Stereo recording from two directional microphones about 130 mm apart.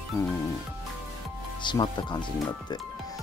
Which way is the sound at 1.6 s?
35° left (ahead or behind).